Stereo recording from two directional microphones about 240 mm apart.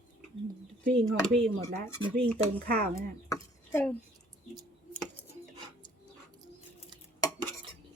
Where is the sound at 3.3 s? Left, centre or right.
Centre.